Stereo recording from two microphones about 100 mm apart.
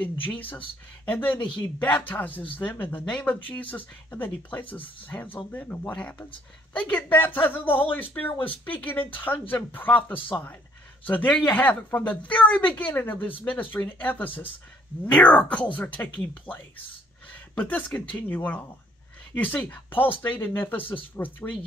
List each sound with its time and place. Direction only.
0.0 s a woman's voice: 15° left (ahead or behind)
17.6 s a woman's voice: 15° left (ahead or behind)